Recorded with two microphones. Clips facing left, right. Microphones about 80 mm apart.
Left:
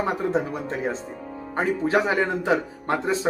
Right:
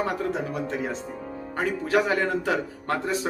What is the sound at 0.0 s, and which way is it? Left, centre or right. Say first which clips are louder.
A man's voice: left 3 dB; left.